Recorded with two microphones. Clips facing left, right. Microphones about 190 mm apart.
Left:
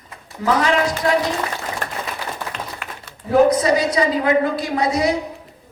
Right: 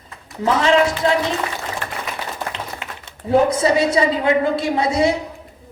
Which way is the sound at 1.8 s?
45° left (ahead or behind).